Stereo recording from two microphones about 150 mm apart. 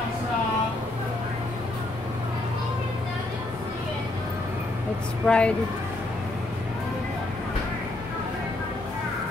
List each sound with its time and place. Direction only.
5.2 s speech: 5° left (ahead or behind)